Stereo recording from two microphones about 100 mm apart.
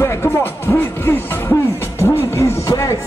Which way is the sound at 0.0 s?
25° left (ahead or behind).